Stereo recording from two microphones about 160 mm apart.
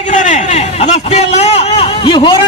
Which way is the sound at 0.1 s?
50° left (ahead or behind).